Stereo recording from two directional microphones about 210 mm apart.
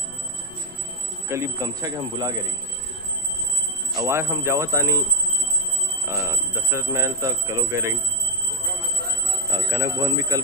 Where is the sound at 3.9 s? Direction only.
15° right (ahead or behind).